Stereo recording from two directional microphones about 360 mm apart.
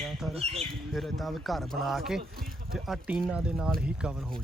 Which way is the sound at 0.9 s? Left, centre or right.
Centre.